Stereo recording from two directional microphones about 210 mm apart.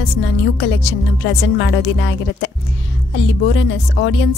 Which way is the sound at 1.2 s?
60° left (ahead or behind).